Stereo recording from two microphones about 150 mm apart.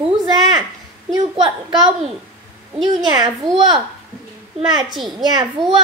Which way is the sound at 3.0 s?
30° right (ahead or behind).